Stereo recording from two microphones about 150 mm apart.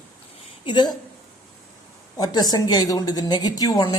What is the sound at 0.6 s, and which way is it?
Speech, 30° left (ahead or behind).